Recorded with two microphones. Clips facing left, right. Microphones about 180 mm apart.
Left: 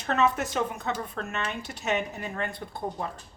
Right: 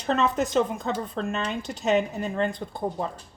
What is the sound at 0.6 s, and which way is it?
Speech, 25° right (ahead or behind).